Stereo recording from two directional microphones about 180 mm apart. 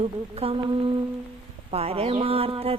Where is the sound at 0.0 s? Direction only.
30° right (ahead or behind).